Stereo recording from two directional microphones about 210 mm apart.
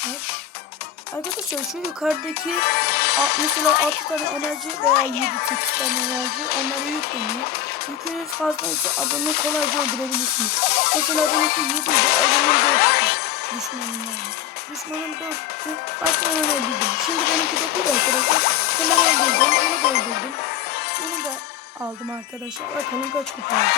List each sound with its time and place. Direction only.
2.0 s speech: centre (ahead or behind)
2.6 s speech: 50° left (ahead or behind)
4.9 s speech: 45° left (ahead or behind)
8.6 s speech: 45° left (ahead or behind)
16.3 s speech: 50° left (ahead or behind)
23.5 s speech: 50° left (ahead or behind)